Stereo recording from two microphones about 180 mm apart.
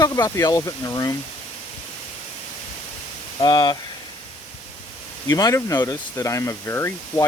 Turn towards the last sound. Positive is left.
turn(degrees=15)  # may be behind; listen again after turning